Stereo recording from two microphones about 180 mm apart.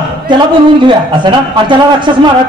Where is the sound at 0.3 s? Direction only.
25° right (ahead or behind).